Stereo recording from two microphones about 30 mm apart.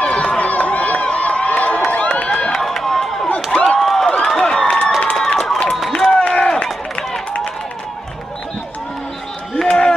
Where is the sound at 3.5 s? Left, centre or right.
Left.